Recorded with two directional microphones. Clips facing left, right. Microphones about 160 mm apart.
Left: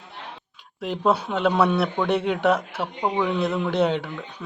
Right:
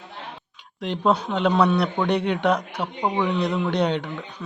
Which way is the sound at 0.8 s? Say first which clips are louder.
Even; 5° left (ahead or behind).